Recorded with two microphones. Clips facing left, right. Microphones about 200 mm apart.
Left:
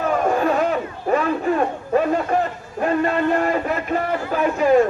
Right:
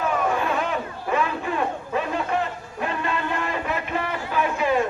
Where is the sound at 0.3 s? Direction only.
40° left (ahead or behind).